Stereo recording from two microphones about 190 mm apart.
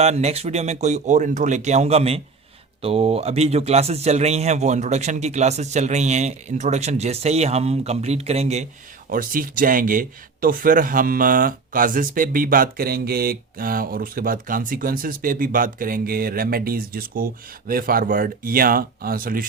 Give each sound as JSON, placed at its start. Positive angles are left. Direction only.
{"t": 0.0, "sound": "a man's voice", "side_deg": -35}
{"t": 9.0, "sound": "speech", "side_deg": -45}